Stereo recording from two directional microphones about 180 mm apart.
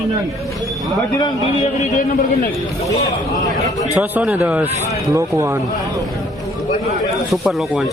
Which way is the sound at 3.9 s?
10° right (ahead or behind).